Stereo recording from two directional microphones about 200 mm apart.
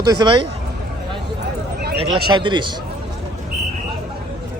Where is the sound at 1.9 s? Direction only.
25° right (ahead or behind).